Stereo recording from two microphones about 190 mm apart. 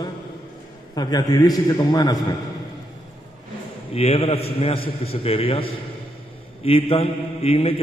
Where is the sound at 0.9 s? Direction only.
20° left (ahead or behind).